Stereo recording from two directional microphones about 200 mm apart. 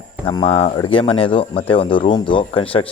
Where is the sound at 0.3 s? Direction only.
25° left (ahead or behind).